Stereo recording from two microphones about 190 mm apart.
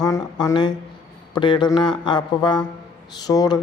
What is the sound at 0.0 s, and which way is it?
Speech, 20° left (ahead or behind).